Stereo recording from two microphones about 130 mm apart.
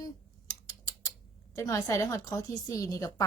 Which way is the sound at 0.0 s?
30° left (ahead or behind).